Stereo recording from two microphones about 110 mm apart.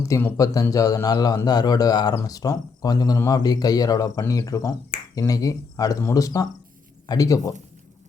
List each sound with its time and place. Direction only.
0.3 s speech: 30° left (ahead or behind)